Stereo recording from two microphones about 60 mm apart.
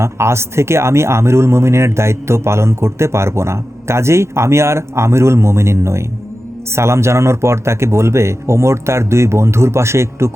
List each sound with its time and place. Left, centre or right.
0.0 s speech: right